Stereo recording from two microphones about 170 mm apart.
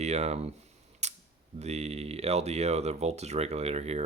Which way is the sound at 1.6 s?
40° right (ahead or behind).